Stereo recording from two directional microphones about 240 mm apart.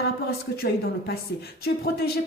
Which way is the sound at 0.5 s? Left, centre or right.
Left.